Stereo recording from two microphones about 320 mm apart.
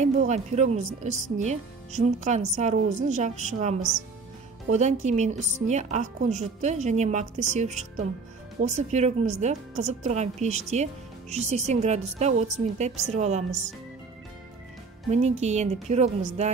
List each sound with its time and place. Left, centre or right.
0.0 s speech: right
15.0 s speech: right